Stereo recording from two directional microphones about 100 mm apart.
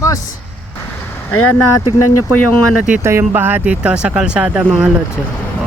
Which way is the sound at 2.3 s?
15° left (ahead or behind).